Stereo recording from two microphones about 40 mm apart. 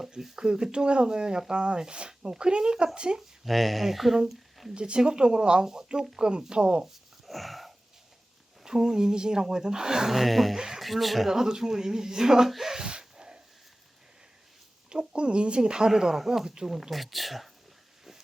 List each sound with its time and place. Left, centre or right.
0.2 s speech: centre
0.4 s speech: right
3.2 s speech: centre
4.2 s a sound: centre
4.7 s speech: right
6.8 s wheeze: centre
8.6 s speech: centre
10.6 s speech: centre
10.8 s speech: centre
11.3 s speech: centre
12.8 s a sound: centre
14.8 s speech: right; by 17.5 s centre